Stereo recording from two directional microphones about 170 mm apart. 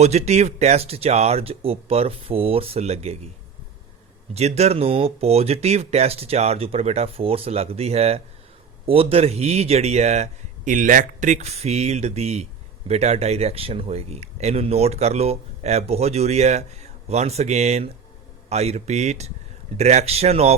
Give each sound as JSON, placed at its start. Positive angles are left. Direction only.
{"t": 0.0, "sound": "speech", "side_deg": -40}
{"t": 4.4, "sound": "speech", "side_deg": -40}